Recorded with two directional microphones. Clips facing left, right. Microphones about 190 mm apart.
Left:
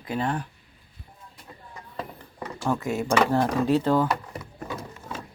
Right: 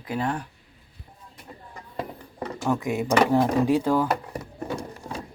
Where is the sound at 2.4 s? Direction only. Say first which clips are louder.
Right 2 dB; 15° right (ahead or behind).